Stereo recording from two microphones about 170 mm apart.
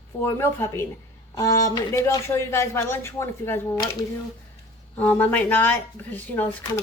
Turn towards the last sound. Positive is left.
turn(degrees=15)  # may be behind; listen again after turning